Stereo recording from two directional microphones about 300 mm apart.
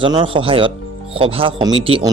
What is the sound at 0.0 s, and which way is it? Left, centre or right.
Speech, centre.